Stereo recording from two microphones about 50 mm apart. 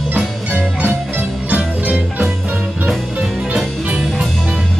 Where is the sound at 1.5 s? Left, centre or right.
Right.